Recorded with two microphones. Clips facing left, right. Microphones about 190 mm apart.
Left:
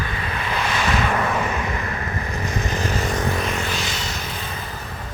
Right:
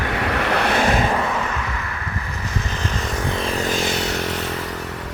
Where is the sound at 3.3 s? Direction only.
30° right (ahead or behind); by 5.1 s 75° right (ahead or behind).